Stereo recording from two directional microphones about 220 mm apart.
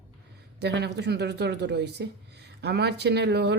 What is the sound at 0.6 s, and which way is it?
A woman's voice, 50° right (ahead or behind).